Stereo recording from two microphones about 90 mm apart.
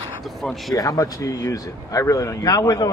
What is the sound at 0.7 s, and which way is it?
Speech, 40° left (ahead or behind).